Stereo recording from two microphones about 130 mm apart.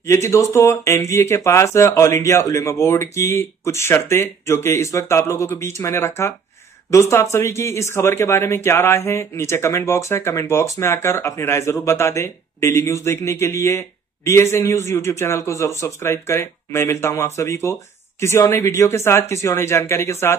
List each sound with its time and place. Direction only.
0.0 s speech: 20° left (ahead or behind)